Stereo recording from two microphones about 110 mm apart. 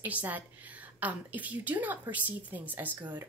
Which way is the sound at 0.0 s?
15° right (ahead or behind).